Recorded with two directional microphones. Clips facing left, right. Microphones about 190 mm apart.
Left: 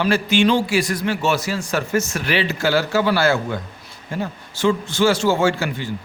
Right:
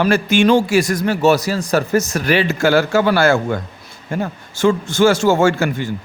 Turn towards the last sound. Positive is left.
turn(degrees=-45)  # may be behind; listen again after turning